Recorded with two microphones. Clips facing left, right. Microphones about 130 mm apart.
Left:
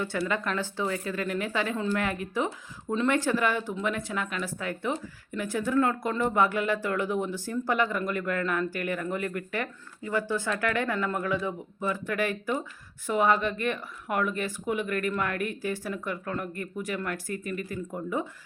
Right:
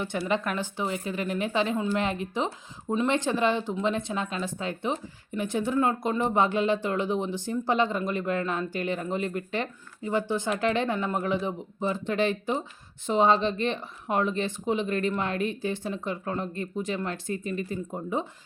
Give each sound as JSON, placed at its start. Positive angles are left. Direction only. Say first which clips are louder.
{"t": 0.0, "sound": "speech", "louder": "right 1 dB", "side_deg": -20}